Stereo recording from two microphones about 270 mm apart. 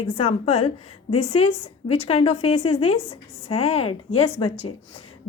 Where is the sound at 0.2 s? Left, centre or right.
Left.